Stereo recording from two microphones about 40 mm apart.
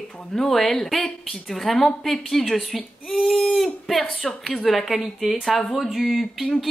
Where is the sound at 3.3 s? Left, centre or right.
Centre.